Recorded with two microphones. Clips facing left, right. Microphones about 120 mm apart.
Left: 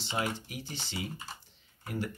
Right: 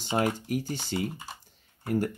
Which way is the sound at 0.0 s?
45° right (ahead or behind).